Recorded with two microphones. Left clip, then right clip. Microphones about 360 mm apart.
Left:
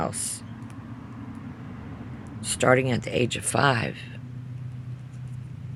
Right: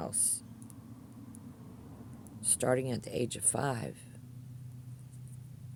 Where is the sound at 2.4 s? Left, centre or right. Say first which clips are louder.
Left 10 dB; right.